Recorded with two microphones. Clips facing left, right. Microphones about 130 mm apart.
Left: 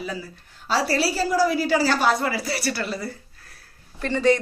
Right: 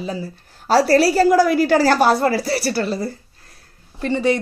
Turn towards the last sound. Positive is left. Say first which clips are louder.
# right 1 dB
turn(degrees=-15)  # may be behind; listen again after turning